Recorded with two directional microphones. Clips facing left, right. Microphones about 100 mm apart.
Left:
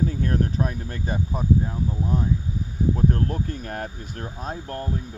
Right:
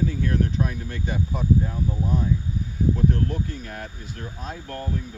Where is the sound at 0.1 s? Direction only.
40° left (ahead or behind).